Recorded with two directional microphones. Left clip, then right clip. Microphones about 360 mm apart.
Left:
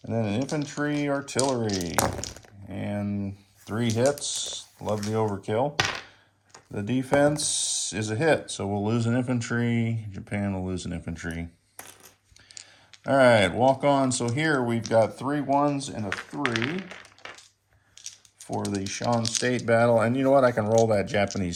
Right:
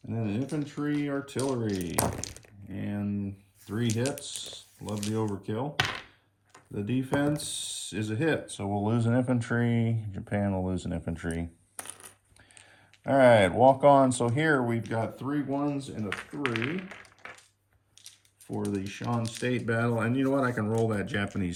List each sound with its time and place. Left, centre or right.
0.1 s speech: centre
13.1 s speech: centre; by 17.3 s left
18.5 s speech: centre